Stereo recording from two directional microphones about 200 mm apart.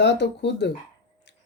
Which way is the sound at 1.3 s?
60° left (ahead or behind).